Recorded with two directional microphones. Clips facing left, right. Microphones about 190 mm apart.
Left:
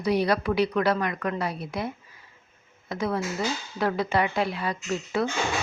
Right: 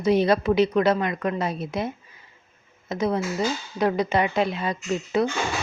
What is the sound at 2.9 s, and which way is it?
A woman's voice, 20° right (ahead or behind).